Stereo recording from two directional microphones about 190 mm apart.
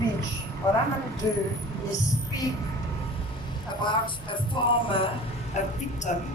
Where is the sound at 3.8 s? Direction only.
25° left (ahead or behind).